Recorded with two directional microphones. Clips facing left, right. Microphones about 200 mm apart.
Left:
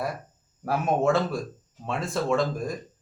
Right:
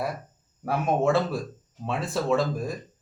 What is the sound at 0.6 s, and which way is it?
A man's voice, centre (ahead or behind).